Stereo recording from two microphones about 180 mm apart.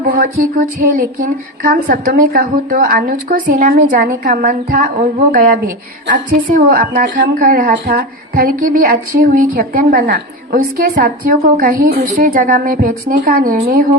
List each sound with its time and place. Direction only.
0.1 s a woman's voice: 50° right (ahead or behind)